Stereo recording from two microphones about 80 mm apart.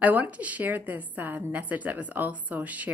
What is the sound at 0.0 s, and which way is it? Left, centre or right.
A woman's voice, centre.